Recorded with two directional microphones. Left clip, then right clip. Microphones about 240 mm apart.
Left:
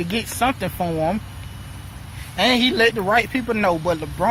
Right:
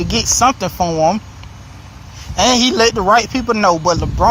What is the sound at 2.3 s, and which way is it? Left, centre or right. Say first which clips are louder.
Speech: right 5 dB; right.